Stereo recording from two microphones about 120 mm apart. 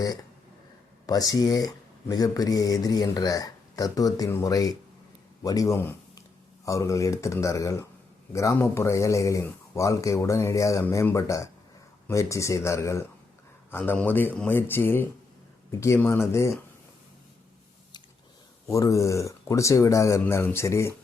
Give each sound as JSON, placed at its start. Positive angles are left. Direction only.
{"t": 0.0, "sound": "speech", "side_deg": 30}
{"t": 18.7, "sound": "speech", "side_deg": 25}